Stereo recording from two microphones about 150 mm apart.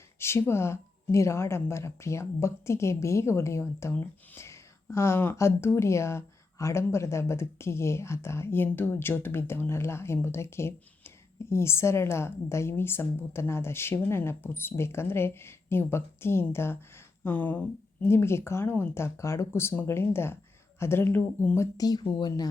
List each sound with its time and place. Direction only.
0.2 s speech: 15° left (ahead or behind)